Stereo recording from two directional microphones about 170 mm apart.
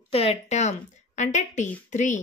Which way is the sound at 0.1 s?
35° left (ahead or behind).